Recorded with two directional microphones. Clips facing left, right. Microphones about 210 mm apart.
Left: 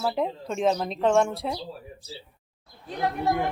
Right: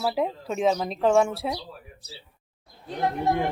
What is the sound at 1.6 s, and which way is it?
Speech, 30° left (ahead or behind).